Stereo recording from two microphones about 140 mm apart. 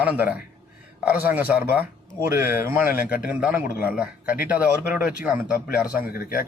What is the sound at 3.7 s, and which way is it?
Speech, 90° left.